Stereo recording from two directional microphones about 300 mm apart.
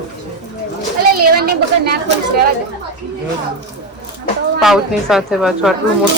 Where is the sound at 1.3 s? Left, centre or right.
Right.